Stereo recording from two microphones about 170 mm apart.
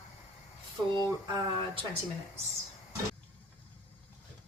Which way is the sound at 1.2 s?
25° right (ahead or behind).